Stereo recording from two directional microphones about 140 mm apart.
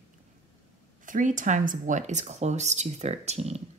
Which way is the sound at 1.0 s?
70° right (ahead or behind).